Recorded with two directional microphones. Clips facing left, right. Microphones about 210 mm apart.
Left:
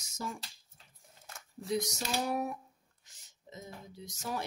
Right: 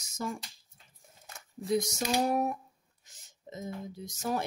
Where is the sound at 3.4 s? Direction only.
50° right (ahead or behind).